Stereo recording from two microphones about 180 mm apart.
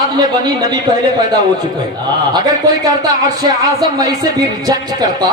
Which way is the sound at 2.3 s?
20° right (ahead or behind).